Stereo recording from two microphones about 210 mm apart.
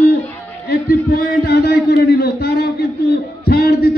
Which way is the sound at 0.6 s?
50° left (ahead or behind).